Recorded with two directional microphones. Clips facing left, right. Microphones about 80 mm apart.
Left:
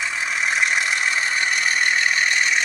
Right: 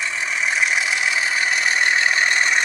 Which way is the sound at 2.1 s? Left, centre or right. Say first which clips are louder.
Right 2 dB; right.